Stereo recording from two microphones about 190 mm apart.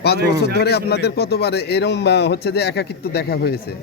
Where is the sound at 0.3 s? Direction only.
60° left (ahead or behind).